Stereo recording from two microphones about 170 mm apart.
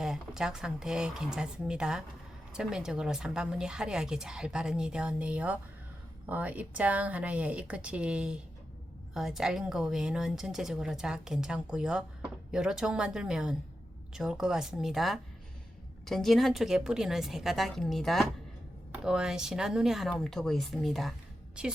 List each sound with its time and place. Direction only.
0.0 s speech: 5° right (ahead or behind)